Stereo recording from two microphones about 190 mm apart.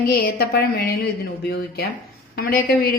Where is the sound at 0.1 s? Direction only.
50° left (ahead or behind).